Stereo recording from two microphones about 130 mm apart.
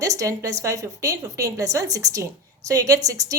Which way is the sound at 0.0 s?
25° right (ahead or behind).